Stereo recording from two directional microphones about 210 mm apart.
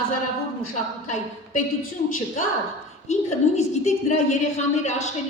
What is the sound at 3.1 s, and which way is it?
A woman's voice, 35° left (ahead or behind).